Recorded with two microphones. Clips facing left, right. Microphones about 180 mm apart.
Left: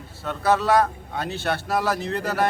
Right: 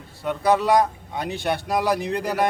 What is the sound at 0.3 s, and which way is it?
Speech, 15° right (ahead or behind).